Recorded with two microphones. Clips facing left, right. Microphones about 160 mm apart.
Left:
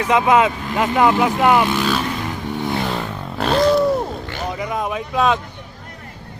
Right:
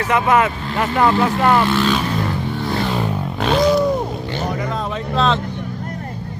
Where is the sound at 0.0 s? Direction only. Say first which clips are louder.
Left 1 dB; 15° left (ahead or behind).